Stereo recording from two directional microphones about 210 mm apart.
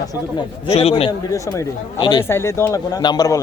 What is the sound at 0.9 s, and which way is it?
Speech, 20° left (ahead or behind).